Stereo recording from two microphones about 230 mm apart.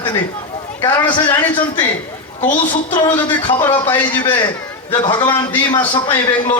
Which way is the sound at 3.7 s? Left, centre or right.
Centre.